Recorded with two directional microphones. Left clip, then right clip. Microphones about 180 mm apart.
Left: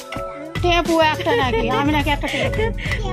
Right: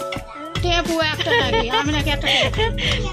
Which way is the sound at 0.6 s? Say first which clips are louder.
Left 3 dB; 65° left (ahead or behind).